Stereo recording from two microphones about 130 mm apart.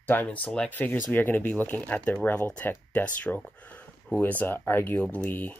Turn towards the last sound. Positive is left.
turn(degrees=15)  # may be behind; listen again after turning